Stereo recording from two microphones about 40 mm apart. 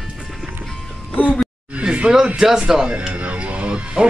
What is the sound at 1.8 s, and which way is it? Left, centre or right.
Speech, right.